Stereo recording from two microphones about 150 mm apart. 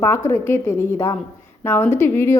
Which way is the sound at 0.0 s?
15° left (ahead or behind).